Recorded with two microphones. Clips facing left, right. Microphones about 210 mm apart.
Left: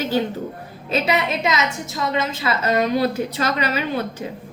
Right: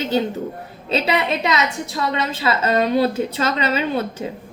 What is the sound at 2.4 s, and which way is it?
A woman's voice, 25° right (ahead or behind).